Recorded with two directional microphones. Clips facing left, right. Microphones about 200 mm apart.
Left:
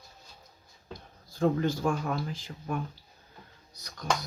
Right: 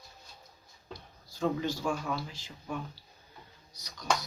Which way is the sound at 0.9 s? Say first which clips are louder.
Left 6 dB; 55° left (ahead or behind).